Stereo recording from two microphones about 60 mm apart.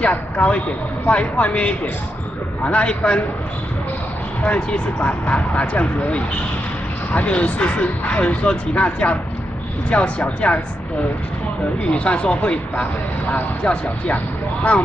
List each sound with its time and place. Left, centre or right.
0.0 s speech: left
4.4 s speech: left
11.9 s speech: left